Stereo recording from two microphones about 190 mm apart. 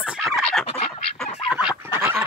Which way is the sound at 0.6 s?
30° left (ahead or behind).